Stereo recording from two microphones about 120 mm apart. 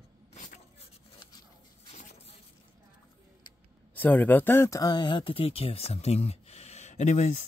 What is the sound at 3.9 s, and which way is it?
Speech, 15° left (ahead or behind).